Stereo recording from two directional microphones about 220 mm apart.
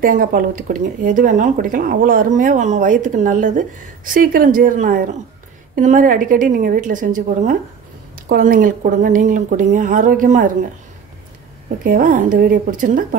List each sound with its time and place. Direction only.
0.0 s speech: 40° right (ahead or behind)
11.8 s speech: 40° right (ahead or behind)